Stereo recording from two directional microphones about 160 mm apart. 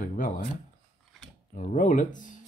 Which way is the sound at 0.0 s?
60° left (ahead or behind).